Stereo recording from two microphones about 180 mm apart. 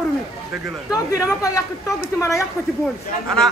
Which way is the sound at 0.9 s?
20° left (ahead or behind).